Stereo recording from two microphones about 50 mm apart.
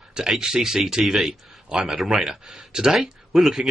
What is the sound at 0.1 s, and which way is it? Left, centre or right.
A man's voice, centre.